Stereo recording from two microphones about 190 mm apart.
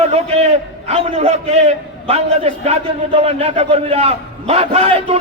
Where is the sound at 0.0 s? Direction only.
30° right (ahead or behind).